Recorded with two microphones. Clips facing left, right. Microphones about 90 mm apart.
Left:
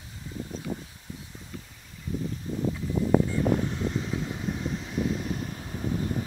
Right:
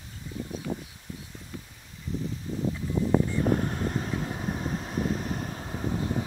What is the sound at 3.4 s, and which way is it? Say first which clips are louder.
Vehicle: even; 45° right (ahead or behind).